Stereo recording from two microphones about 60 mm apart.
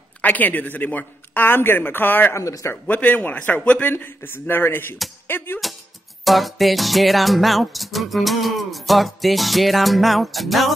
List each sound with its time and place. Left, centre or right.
0.2 s a man's voice: left
2.3 s a man's voice: left
2.7 s a man's voice: left
6.2 s music: centre